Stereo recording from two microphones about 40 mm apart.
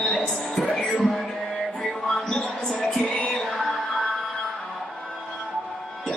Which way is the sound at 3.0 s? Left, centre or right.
Left.